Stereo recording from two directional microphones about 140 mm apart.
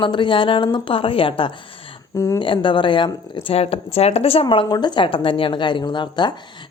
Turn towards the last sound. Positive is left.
turn(degrees=35)  # may be behind; listen again after turning